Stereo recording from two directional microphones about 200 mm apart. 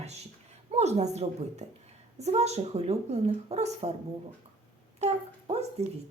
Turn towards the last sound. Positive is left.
turn(degrees=-30)  # may be behind; listen again after turning